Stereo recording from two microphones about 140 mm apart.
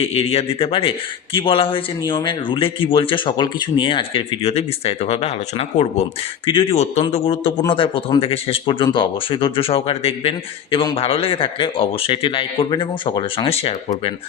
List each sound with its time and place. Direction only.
0.0 s speech: 50° left (ahead or behind)
6.4 s a man's voice: 40° left (ahead or behind)